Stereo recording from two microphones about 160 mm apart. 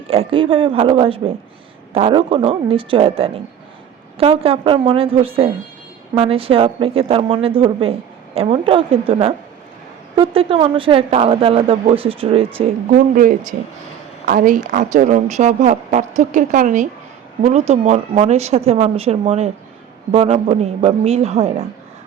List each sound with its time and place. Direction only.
0.1 s speech: 35° right (ahead or behind)
12.9 s a woman's voice: 60° right (ahead or behind); by 21.5 s 40° right (ahead or behind)